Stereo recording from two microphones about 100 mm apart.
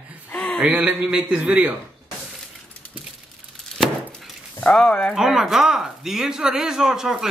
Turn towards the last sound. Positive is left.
turn(degrees=-5)  # may be behind; listen again after turning